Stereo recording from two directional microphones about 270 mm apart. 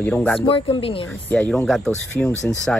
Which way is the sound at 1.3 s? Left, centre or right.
Centre.